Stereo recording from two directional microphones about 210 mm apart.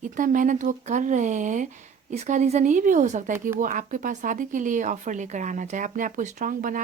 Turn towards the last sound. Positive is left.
turn(degrees=-40)  # may be behind; listen again after turning